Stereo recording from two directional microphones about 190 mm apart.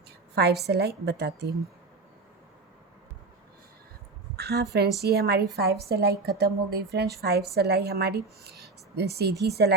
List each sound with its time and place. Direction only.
0.3 s a woman's voice: 60° right (ahead or behind)
4.4 s a woman's voice: 60° right (ahead or behind)